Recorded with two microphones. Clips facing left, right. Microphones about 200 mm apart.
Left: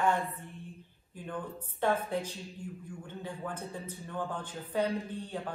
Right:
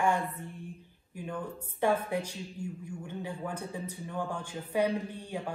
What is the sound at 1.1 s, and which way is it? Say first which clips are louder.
Speech: right 2 dB; 10° right (ahead or behind).